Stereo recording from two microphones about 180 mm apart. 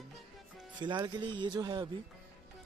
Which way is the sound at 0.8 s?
25° right (ahead or behind).